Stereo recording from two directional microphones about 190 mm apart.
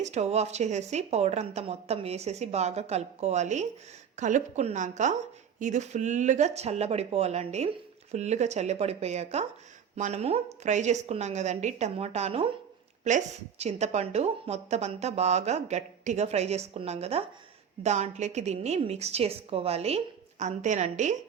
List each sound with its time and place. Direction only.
0.0 s a woman's voice: 35° right (ahead or behind)